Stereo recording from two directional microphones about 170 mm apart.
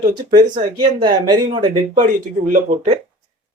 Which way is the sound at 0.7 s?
25° right (ahead or behind).